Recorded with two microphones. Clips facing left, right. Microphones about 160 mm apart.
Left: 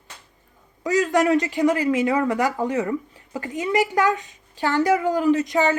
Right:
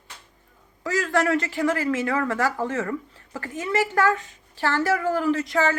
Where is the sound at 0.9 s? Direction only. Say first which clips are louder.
Left 4 dB; 20° left (ahead or behind).